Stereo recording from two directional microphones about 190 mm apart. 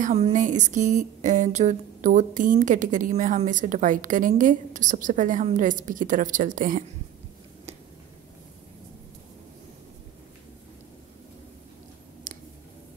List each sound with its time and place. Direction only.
0.0 s speech: 40° right (ahead or behind)
12.3 s clicking: 45° right (ahead or behind)